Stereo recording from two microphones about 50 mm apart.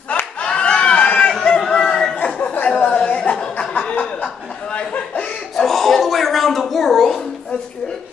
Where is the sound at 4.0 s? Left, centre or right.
Centre.